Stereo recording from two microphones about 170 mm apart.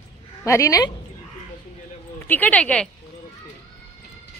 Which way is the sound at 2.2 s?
10° left (ahead or behind).